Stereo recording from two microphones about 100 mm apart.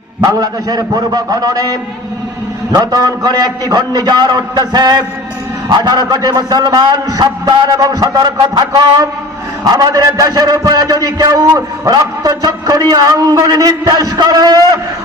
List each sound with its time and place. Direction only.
0.2 s a man's voice: 40° right (ahead or behind)